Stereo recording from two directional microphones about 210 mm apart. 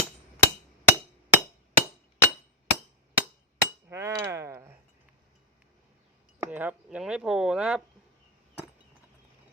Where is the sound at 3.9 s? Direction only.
15° right (ahead or behind).